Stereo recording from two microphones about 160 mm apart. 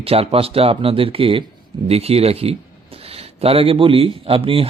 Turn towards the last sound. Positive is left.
turn(degrees=-35)  # may be behind; listen again after turning